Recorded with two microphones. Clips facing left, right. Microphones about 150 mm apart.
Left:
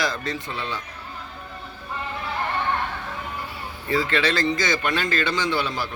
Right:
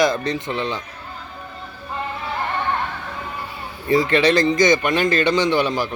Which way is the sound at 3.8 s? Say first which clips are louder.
Right 7 dB; 20° right (ahead or behind).